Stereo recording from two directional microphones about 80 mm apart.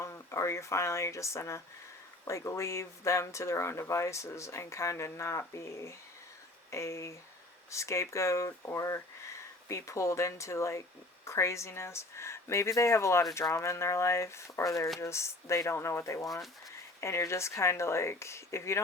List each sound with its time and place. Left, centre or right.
0.0 s speech: left